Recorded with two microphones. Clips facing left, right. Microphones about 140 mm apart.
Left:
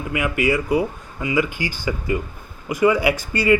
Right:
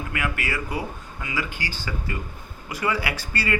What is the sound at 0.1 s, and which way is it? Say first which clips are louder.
Speech: left 10 dB; 15° left (ahead or behind).